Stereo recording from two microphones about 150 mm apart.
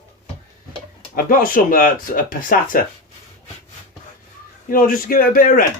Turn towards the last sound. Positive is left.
turn(degrees=70)  # may be behind; listen again after turning